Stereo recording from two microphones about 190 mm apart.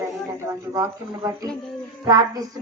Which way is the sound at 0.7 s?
15° right (ahead or behind).